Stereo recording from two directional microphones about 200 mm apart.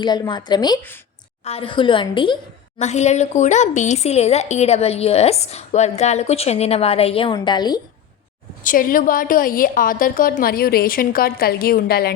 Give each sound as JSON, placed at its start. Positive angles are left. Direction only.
{"t": 0.0, "sound": "a woman's voice", "side_deg": 20}
{"t": 2.7, "sound": "a woman's voice", "side_deg": 35}
{"t": 8.6, "sound": "a woman's voice", "side_deg": 45}